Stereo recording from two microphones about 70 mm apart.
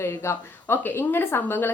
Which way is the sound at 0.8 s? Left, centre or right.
Left.